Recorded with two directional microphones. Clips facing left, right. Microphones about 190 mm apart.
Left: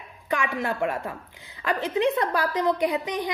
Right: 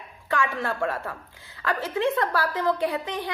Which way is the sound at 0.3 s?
15° left (ahead or behind).